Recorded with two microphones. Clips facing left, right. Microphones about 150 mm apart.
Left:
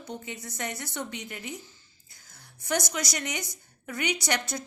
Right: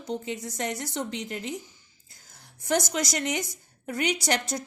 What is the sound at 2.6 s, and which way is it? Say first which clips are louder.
A woman's voice: right 4 dB; 50° right (ahead or behind).